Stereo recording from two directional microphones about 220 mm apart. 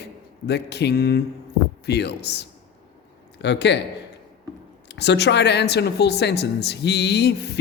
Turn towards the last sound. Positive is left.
turn(degrees=50)  # may be behind; listen again after turning